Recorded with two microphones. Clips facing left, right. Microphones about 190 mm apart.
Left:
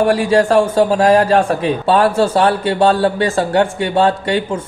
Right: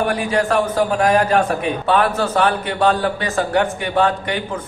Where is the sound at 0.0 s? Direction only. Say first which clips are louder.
Left 6 dB; 30° left (ahead or behind).